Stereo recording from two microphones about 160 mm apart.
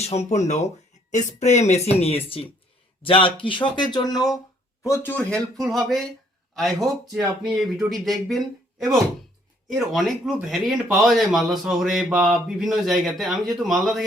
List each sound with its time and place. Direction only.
0.0 s speech: 45° left (ahead or behind); by 4.4 s 25° left (ahead or behind)
4.9 s speech: 10° left (ahead or behind)
5.6 s speech: centre (ahead or behind)